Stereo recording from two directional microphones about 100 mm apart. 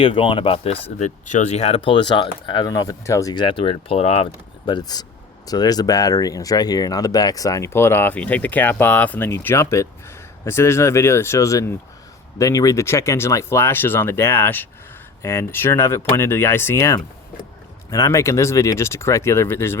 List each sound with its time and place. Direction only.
0.0 s speech: 60° left (ahead or behind)
2.6 s speech: 35° left (ahead or behind)
3.3 s speech: 55° left (ahead or behind); by 4.7 s 80° left
4.7 s speech: 40° left (ahead or behind); by 19.8 s 25° left (ahead or behind)